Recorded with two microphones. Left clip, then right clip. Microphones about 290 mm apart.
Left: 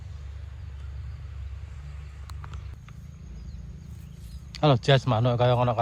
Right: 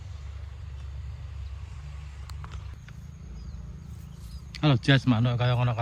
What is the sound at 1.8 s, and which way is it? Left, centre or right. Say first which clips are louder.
Vehicle: right 1 dB; right.